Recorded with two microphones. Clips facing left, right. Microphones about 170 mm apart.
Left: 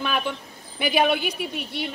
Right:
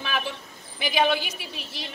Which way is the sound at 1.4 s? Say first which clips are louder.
Left 8 dB; 60° left (ahead or behind).